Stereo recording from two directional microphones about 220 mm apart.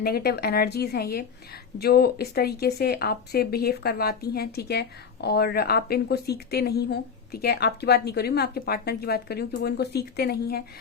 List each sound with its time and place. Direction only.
0.0 s speech: 45° left (ahead or behind)